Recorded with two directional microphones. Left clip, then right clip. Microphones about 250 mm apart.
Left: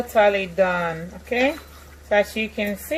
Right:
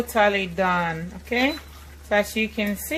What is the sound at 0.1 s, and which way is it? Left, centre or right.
A woman's voice, right.